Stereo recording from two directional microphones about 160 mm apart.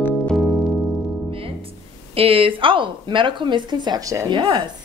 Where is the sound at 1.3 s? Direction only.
35° right (ahead or behind).